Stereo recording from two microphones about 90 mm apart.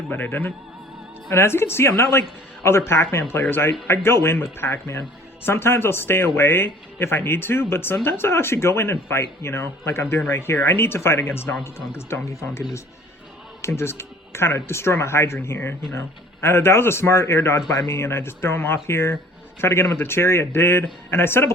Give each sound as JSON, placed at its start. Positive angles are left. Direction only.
{"t": 0.1, "sound": "speech", "side_deg": 20}